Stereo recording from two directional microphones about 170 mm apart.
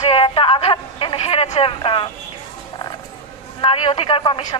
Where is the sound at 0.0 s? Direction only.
35° left (ahead or behind).